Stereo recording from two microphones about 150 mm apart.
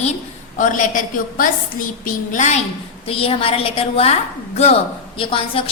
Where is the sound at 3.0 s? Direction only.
40° left (ahead or behind).